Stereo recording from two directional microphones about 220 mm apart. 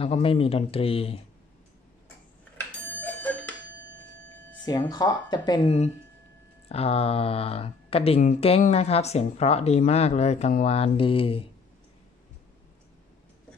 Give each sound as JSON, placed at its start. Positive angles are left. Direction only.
{"t": 0.0, "sound": "speech", "side_deg": 25}
{"t": 2.5, "sound": "clock", "side_deg": 10}
{"t": 4.6, "sound": "speech", "side_deg": 20}